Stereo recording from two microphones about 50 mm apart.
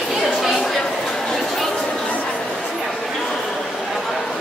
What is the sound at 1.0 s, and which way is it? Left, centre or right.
Chatter, centre.